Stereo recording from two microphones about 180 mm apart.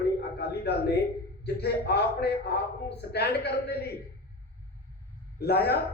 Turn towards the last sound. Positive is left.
turn(degrees=65)  # may be behind; listen again after turning